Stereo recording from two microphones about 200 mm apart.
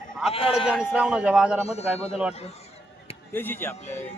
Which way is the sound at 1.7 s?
30° left (ahead or behind).